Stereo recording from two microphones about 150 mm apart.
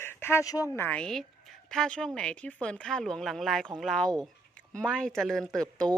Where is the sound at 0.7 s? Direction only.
10° left (ahead or behind).